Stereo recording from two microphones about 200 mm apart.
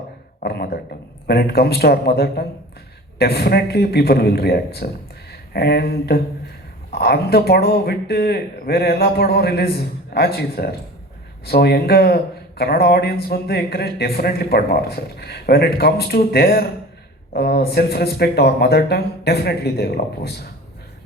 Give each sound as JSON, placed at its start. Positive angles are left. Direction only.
{"t": 0.3, "sound": "speech", "side_deg": 50}